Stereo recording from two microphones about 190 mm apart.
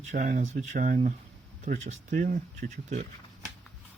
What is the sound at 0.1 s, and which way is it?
Speech, 45° right (ahead or behind).